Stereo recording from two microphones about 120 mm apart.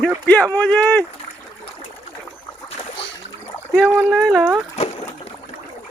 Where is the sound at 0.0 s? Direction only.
10° left (ahead or behind).